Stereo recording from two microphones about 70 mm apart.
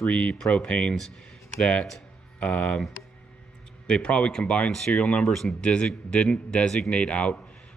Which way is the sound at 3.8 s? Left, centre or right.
Centre.